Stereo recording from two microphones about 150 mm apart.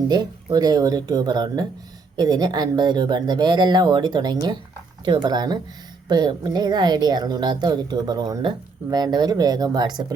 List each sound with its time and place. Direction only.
0.1 s a woman's voice: 25° right (ahead or behind)